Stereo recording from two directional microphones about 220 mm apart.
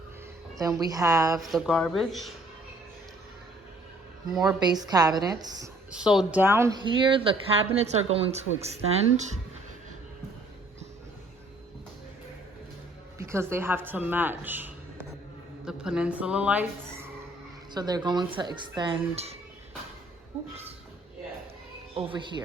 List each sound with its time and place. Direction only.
0.6 s a woman's voice: 15° right (ahead or behind)
1.4 s a woman's voice: centre (ahead or behind)
4.3 s a woman's voice: 15° right (ahead or behind)
5.9 s a woman's voice: 5° right (ahead or behind)
6.8 s speech: 20° right (ahead or behind)
13.1 s a woman's voice: 10° right (ahead or behind)
17.7 s speech: 20° right (ahead or behind)
21.9 s speech: 25° right (ahead or behind)